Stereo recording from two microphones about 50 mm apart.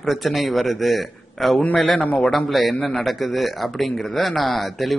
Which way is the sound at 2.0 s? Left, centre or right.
Left.